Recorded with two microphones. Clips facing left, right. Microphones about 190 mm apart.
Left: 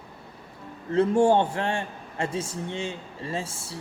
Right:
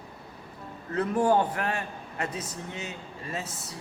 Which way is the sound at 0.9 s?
25° left (ahead or behind).